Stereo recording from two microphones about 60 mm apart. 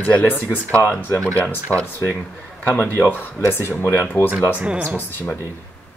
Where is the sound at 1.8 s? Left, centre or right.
Left.